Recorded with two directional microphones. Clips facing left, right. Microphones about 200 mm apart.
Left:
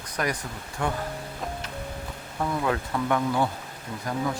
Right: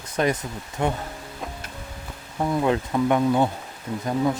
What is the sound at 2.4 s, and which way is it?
Speech, 25° right (ahead or behind).